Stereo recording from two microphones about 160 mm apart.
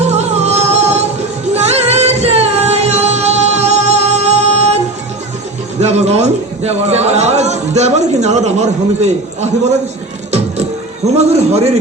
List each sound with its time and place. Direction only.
0.1 s music: 45° right (ahead or behind)
5.8 s a sound: 45° right (ahead or behind)
11.0 s a man's voice: 45° right (ahead or behind)